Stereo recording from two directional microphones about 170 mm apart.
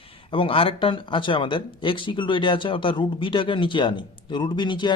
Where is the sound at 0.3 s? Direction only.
30° left (ahead or behind).